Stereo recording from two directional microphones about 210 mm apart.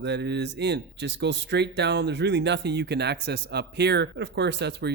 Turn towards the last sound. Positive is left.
turn(degrees=-55)  # may be behind; listen again after turning